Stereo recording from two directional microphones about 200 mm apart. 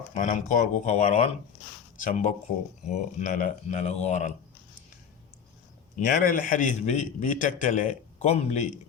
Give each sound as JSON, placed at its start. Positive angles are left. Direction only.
{"t": 0.1, "sound": "a man's voice", "side_deg": 40}
{"t": 6.1, "sound": "a man's voice", "side_deg": 45}